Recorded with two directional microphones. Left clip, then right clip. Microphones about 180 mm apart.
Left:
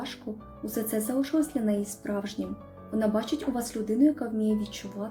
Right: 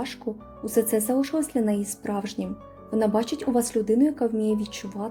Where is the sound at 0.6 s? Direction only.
40° right (ahead or behind).